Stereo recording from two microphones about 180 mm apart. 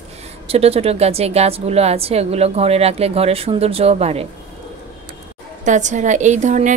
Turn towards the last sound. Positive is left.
turn(degrees=-40)  # may be behind; listen again after turning